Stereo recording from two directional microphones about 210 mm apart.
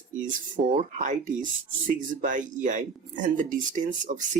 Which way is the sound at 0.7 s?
30° right (ahead or behind).